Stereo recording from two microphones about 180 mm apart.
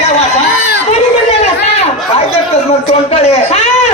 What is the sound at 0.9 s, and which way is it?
Chatter, 35° left (ahead or behind).